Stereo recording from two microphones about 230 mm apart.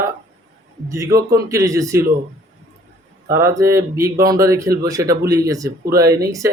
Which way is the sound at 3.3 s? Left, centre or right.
Centre.